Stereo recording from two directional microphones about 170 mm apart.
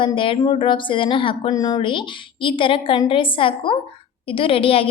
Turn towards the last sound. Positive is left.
turn(degrees=35)  # may be behind; listen again after turning